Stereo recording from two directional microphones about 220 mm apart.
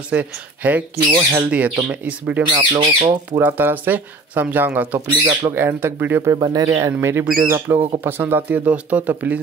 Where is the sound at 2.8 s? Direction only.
20° right (ahead or behind).